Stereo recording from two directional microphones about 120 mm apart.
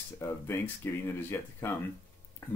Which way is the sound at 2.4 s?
20° left (ahead or behind).